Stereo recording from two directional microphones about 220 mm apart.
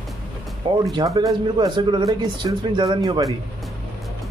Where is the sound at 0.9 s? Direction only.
15° right (ahead or behind).